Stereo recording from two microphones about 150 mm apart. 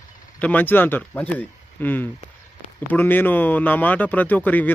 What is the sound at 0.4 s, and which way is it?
Speech, 10° left (ahead or behind).